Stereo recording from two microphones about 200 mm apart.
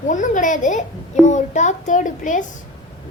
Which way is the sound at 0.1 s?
40° left (ahead or behind).